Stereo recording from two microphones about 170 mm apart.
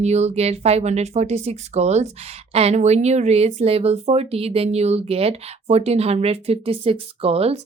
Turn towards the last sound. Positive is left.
turn(degrees=-35)  # may be behind; listen again after turning